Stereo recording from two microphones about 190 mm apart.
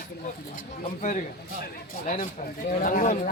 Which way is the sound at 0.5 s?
40° left (ahead or behind).